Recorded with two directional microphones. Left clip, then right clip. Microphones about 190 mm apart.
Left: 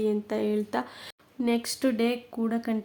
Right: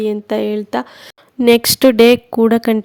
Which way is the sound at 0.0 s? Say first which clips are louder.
Right 10 dB; 40° right (ahead or behind).